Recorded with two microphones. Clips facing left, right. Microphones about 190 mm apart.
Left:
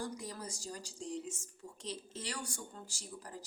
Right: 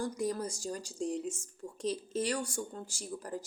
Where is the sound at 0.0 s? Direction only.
50° right (ahead or behind).